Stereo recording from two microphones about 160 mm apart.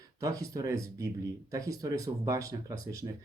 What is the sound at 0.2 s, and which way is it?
Speech, 20° right (ahead or behind).